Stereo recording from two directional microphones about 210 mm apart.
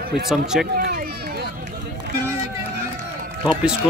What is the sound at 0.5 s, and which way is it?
Speech, centre (ahead or behind).